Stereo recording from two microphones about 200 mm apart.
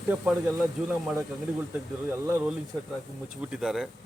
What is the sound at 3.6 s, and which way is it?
Speech, 5° right (ahead or behind).